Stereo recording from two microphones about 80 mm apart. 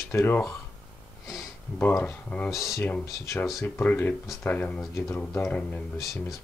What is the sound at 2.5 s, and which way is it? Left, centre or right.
Speech, centre.